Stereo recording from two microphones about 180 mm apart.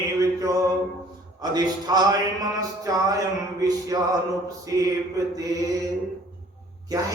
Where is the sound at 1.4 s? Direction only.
20° right (ahead or behind).